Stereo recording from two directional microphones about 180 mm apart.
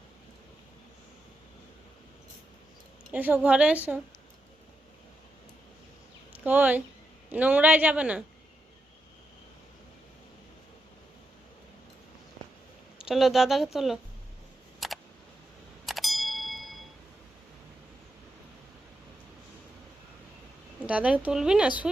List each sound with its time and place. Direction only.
3.1 s speech: 10° right (ahead or behind)
6.3 s speech: 10° right (ahead or behind)
13.0 s speech: centre (ahead or behind)
14.8 s a sound: centre (ahead or behind)
20.7 s speech: 5° right (ahead or behind)